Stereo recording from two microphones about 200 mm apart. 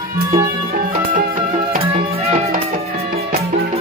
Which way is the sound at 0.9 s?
40° right (ahead or behind).